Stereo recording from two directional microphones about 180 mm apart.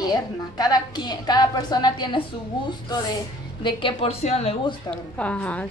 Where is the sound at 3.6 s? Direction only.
25° left (ahead or behind).